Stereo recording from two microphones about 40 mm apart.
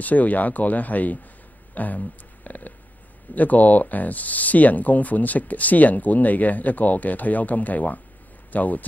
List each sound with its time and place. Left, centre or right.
0.0 s speech: left